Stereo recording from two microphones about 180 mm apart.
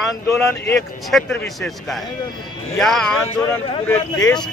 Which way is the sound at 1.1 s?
5° left (ahead or behind).